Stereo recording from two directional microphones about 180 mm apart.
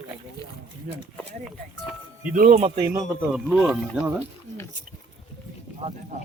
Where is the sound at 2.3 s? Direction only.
45° right (ahead or behind).